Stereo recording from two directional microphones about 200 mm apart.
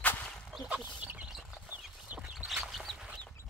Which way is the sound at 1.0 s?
5° right (ahead or behind).